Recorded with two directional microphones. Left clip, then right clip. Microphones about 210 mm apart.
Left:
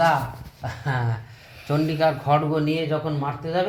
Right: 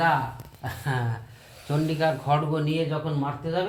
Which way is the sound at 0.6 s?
55° left (ahead or behind).